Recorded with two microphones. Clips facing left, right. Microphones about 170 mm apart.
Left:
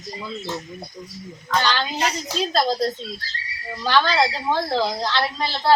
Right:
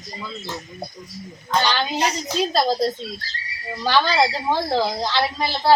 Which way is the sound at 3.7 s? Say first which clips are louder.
Even; 10° right (ahead or behind).